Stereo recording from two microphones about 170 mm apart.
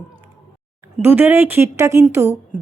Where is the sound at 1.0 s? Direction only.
10° right (ahead or behind).